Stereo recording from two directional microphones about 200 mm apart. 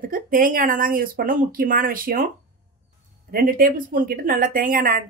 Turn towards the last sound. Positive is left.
turn(degrees=-45)  # may be behind; listen again after turning